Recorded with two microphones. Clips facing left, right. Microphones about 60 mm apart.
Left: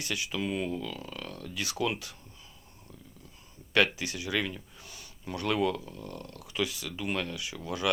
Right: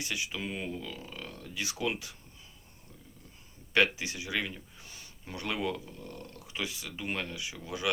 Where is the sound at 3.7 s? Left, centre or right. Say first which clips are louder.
Left 1 dB; right.